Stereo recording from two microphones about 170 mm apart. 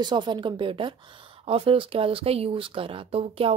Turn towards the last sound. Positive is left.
turn(degrees=-35)  # may be behind; listen again after turning